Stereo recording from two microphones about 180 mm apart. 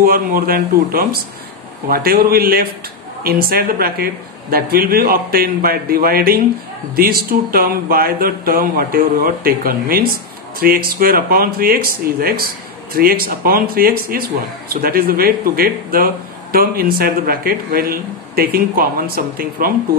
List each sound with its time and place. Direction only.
0.0 s speech: 55° right (ahead or behind)